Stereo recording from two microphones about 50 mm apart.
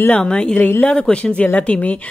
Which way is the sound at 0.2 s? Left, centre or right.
Centre.